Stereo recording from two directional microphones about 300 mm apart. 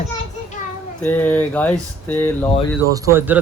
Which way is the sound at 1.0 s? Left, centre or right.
Centre.